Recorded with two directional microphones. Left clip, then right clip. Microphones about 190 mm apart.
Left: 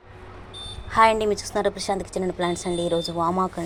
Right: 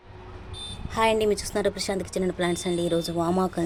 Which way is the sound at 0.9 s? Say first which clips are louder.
Left 4 dB; 10° right (ahead or behind).